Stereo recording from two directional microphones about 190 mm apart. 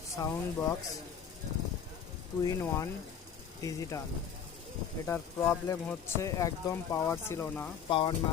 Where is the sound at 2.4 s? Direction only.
15° left (ahead or behind).